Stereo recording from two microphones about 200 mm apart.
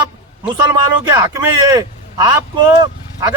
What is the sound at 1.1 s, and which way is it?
A man's voice, 20° right (ahead or behind).